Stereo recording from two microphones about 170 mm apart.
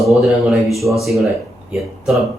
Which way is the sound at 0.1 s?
Centre (ahead or behind).